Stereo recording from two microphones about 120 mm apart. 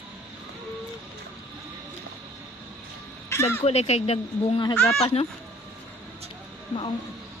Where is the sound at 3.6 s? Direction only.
60° left (ahead or behind).